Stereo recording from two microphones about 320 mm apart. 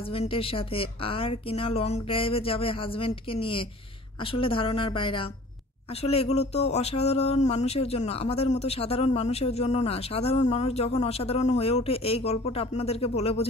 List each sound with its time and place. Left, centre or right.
0.1 s speech: centre